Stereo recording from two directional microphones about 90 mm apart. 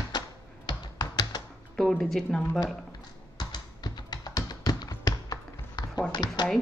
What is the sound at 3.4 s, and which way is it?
Typing, 50° left (ahead or behind).